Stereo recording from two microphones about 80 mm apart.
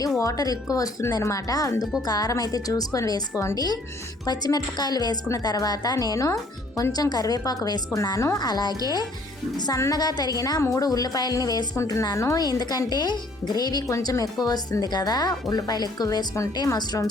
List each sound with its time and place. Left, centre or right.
0.2 s a woman's voice: left
3.3 s a woman's voice: left
4.3 s speech: left
6.9 s a woman's voice: left
8.4 s speech: left
9.7 s a woman's voice: left
10.0 s a woman's voice: left
12.1 s a woman's voice: left
12.4 s speech: left